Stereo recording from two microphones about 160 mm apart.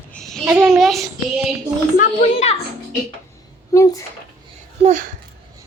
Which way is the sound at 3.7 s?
20° left (ahead or behind).